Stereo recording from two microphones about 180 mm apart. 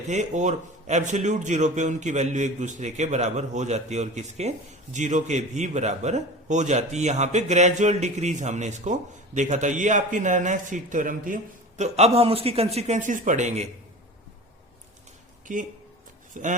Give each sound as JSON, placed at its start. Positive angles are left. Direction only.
{"t": 0.1, "sound": "a man's voice", "side_deg": -40}
{"t": 11.8, "sound": "a man's voice", "side_deg": -35}
{"t": 15.5, "sound": "speech", "side_deg": -45}